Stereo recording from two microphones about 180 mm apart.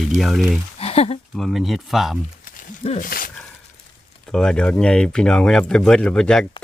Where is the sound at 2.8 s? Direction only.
35° left (ahead or behind).